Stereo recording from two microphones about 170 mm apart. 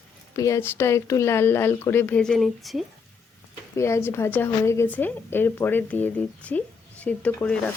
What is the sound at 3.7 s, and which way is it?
A woman's voice, 15° left (ahead or behind).